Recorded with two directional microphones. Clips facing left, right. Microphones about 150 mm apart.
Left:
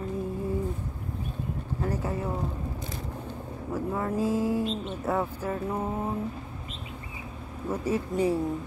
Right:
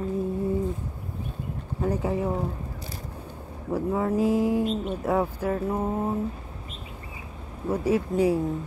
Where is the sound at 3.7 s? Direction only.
10° right (ahead or behind).